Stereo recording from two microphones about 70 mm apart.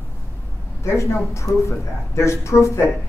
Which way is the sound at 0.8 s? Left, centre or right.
Left.